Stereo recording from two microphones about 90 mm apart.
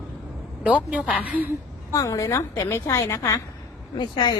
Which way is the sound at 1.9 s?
40° left (ahead or behind).